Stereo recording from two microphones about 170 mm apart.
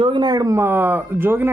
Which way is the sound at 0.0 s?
25° right (ahead or behind).